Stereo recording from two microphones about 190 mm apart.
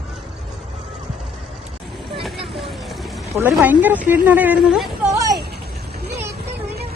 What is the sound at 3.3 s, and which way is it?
Speech, 10° right (ahead or behind).